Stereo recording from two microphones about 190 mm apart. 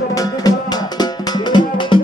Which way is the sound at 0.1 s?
20° left (ahead or behind).